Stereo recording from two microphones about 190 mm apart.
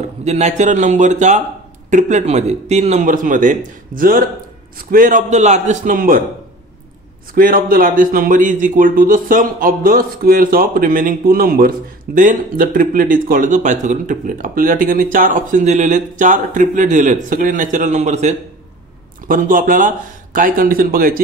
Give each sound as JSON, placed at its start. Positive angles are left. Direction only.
{"t": 0.2, "sound": "speech", "side_deg": -35}
{"t": 7.3, "sound": "speech", "side_deg": -50}